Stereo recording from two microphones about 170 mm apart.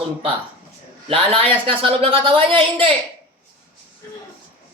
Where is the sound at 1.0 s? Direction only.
35° right (ahead or behind).